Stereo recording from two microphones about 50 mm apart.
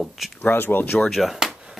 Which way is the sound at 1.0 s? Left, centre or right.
Centre.